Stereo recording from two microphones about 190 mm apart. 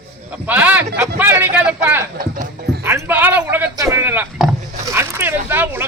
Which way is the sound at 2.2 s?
45° right (ahead or behind).